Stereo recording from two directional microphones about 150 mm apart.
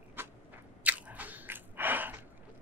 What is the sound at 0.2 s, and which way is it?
Biting, 15° right (ahead or behind).